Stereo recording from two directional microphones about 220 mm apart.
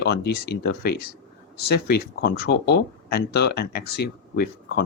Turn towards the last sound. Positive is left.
turn(degrees=45)  # may be behind; listen again after turning